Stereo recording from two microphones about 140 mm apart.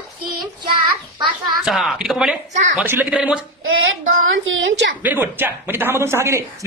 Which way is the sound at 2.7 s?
15° right (ahead or behind).